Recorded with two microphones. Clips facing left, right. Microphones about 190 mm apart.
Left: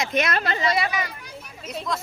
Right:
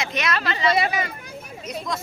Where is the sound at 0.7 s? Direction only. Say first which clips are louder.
Right 2 dB; 30° right (ahead or behind).